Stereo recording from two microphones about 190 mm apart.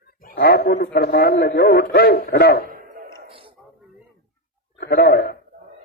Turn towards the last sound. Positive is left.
turn(degrees=55)  # may be behind; listen again after turning